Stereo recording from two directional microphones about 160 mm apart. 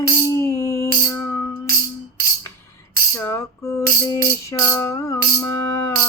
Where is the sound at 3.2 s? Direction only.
15° left (ahead or behind).